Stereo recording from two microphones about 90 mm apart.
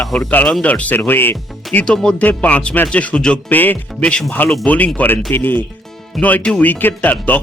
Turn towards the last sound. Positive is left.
turn(degrees=20)  # may be behind; listen again after turning